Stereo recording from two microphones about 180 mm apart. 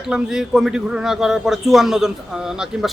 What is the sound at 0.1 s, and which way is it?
A man's voice, 5° right (ahead or behind).